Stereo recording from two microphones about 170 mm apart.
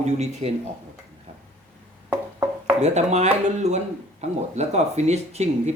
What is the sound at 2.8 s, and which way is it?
Speech, 40° right (ahead or behind).